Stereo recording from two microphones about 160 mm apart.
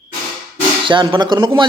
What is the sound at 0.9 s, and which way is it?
Speech, 30° right (ahead or behind).